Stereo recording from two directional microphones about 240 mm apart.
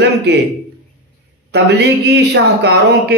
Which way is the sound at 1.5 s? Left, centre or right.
Right.